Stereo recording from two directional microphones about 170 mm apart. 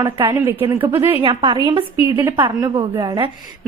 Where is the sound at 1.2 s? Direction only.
30° right (ahead or behind).